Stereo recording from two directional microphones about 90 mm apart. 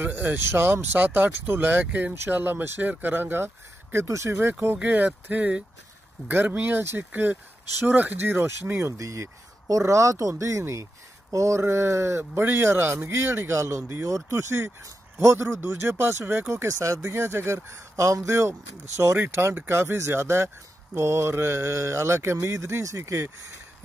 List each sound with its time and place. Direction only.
0.0 s a man's voice: 20° right (ahead or behind)